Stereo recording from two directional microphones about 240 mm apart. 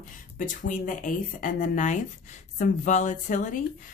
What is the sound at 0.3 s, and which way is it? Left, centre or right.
Speech, left.